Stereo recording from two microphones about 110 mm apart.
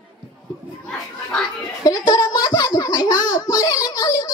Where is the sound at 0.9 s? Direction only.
10° left (ahead or behind).